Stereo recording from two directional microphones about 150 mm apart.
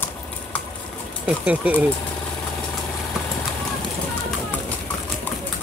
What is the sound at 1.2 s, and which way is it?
Speech, 10° right (ahead or behind).